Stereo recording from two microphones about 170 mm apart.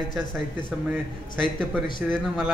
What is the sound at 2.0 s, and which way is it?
Speech, centre (ahead or behind).